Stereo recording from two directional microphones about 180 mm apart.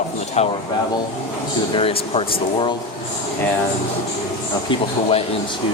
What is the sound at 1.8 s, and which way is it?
Speech, 30° left (ahead or behind).